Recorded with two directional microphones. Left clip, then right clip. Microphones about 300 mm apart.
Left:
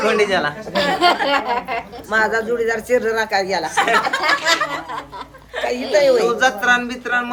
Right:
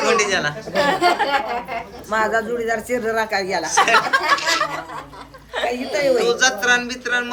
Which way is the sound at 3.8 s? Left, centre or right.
Right.